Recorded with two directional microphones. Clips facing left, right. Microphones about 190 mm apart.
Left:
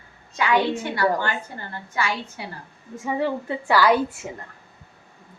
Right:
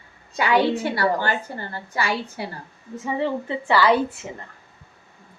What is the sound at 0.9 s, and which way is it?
A woman's voice, 35° right (ahead or behind).